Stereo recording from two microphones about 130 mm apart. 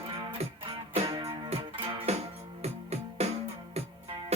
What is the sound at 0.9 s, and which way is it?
Music, 50° right (ahead or behind).